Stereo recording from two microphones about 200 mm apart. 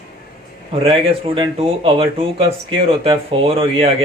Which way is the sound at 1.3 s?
30° right (ahead or behind).